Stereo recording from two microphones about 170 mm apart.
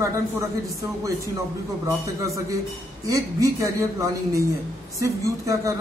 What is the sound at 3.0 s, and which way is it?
A woman's voice, 20° right (ahead or behind).